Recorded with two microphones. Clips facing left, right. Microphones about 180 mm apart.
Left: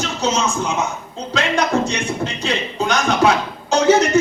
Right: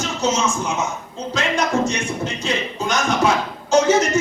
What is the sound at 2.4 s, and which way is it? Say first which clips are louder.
Music: left 3 dB; 65° left (ahead or behind).